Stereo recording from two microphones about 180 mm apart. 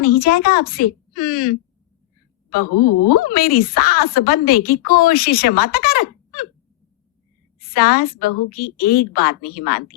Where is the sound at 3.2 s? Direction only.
55° left (ahead or behind).